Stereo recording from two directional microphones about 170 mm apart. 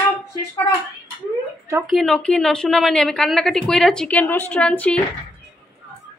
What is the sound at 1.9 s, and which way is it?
A woman's voice, centre (ahead or behind).